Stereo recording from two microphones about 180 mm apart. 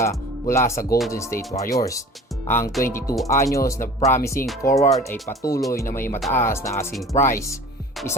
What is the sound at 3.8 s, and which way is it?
Speech, 50° left (ahead or behind).